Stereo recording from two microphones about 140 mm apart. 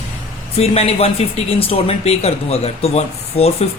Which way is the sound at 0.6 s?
45° left (ahead or behind).